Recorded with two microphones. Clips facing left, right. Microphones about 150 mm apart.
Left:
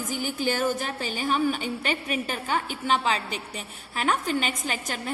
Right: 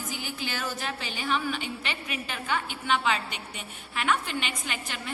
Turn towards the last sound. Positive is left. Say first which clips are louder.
# left 5 dB
turn(degrees=40)  # may be behind; listen again after turning